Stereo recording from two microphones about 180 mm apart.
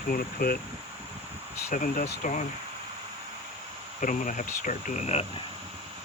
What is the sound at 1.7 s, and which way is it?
Speech, 45° left (ahead or behind).